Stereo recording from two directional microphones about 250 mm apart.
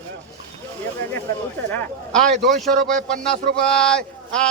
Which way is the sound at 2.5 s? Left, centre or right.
Centre.